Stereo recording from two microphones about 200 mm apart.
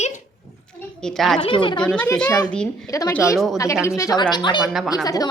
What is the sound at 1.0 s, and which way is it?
Speech, centre (ahead or behind).